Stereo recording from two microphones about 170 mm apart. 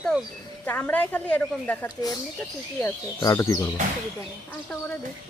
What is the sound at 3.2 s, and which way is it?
Speech, 20° left (ahead or behind).